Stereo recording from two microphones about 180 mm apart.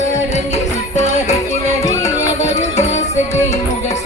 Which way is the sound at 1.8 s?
20° left (ahead or behind).